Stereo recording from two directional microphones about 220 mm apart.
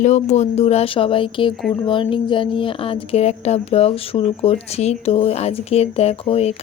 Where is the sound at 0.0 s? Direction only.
30° left (ahead or behind).